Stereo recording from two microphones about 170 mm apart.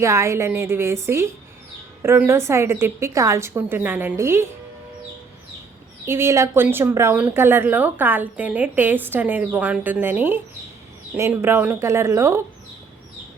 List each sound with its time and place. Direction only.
0.0 s a woman's voice: 15° right (ahead or behind)
6.1 s a woman's voice: 15° right (ahead or behind)